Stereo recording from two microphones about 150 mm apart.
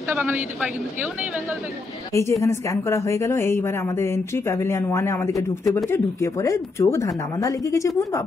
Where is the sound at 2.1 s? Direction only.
20° left (ahead or behind).